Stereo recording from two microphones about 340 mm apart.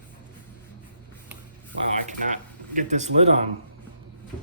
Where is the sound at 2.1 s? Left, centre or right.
Right.